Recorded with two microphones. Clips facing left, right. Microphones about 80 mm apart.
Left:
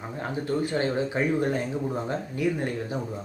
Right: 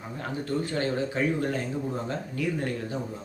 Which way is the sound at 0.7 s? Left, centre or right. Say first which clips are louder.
Left 2 dB; left.